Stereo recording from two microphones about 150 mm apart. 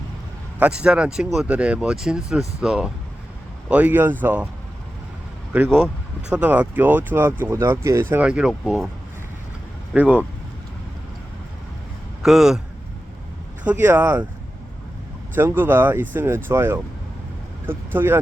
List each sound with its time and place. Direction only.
0.6 s speech: 5° right (ahead or behind)
5.5 s speech: 10° right (ahead or behind)
9.9 s speech: 10° right (ahead or behind)
12.2 s speech: 5° right (ahead or behind)
13.7 s speech: 15° right (ahead or behind)
15.4 s speech: 15° right (ahead or behind)